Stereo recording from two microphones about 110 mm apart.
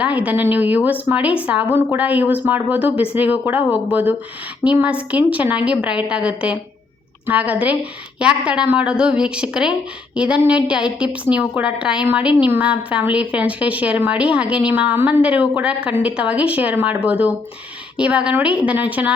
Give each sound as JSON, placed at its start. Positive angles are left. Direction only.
{"t": 0.0, "sound": "a woman's voice", "side_deg": -10}